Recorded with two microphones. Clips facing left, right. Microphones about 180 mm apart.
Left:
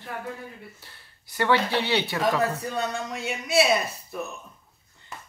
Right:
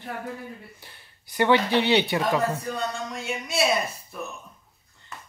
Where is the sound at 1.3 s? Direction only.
20° right (ahead or behind).